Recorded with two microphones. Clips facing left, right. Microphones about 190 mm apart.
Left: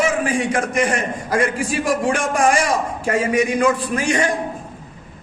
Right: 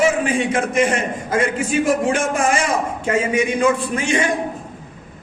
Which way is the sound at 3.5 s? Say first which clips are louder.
Even; 25° right (ahead or behind).